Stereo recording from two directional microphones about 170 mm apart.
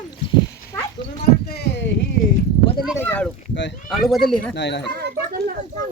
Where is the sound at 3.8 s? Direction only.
Centre (ahead or behind).